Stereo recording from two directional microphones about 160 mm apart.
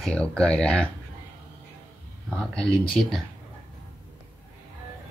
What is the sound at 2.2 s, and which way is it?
Speech, centre (ahead or behind).